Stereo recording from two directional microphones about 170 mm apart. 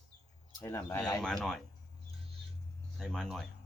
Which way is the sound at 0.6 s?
15° left (ahead or behind).